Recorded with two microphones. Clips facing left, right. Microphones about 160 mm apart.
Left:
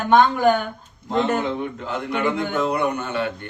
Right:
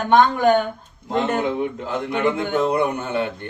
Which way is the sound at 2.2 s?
25° right (ahead or behind).